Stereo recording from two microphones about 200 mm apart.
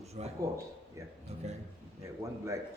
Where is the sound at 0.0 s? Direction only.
30° right (ahead or behind).